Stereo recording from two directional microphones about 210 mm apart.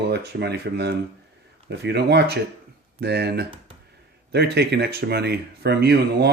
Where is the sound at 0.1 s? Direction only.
50° right (ahead or behind).